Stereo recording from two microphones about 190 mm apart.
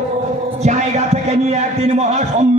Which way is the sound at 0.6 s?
35° right (ahead or behind).